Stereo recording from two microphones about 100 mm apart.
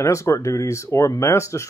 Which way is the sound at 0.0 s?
30° left (ahead or behind).